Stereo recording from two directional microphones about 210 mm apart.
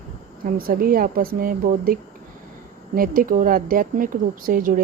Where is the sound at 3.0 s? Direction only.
40° right (ahead or behind).